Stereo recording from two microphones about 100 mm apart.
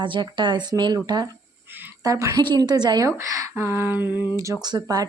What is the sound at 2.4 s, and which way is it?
Speech, 45° right (ahead or behind).